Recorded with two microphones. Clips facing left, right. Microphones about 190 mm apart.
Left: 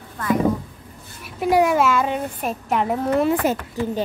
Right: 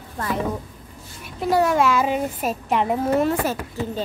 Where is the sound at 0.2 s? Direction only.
30° right (ahead or behind).